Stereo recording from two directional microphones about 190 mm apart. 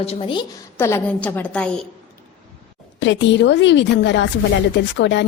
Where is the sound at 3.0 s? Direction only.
70° left (ahead or behind).